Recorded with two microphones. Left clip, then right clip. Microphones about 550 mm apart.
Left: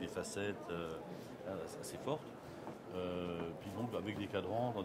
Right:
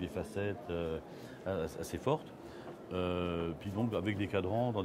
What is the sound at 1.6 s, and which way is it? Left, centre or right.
Speech, right.